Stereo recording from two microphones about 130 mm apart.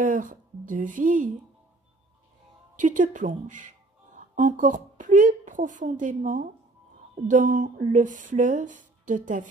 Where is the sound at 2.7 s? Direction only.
85° right.